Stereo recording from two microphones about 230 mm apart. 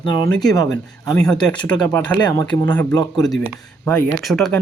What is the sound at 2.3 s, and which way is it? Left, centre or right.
Speech, centre.